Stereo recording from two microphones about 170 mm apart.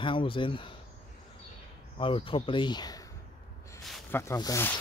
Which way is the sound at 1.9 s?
30° left (ahead or behind).